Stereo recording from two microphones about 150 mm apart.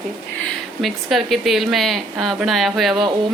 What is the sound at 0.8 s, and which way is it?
A woman's voice, centre (ahead or behind).